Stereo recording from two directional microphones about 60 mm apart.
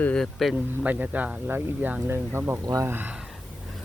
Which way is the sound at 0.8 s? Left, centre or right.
Right.